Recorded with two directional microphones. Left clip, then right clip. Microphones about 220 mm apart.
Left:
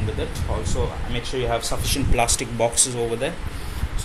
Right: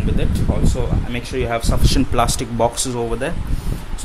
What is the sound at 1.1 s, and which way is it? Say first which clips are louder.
Speech: right 3 dB; 35° right (ahead or behind).